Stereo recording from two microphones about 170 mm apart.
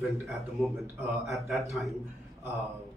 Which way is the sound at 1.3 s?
Centre (ahead or behind).